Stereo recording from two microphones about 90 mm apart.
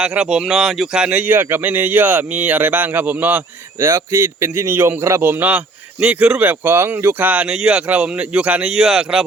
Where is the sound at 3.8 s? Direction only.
30° right (ahead or behind).